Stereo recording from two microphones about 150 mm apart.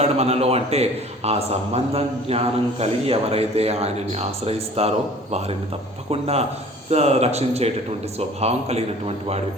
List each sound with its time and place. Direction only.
0.0 s a man's voice: 45° right (ahead or behind)